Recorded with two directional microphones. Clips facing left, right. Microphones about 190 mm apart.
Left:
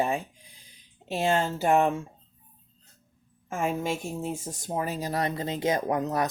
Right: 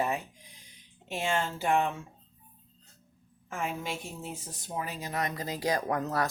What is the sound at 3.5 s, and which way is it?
Speech, 45° left (ahead or behind).